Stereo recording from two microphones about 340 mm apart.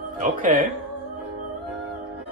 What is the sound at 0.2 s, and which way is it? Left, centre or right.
Speech, right.